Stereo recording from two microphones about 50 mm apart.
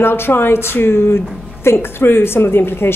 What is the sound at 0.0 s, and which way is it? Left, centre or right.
Speech, left.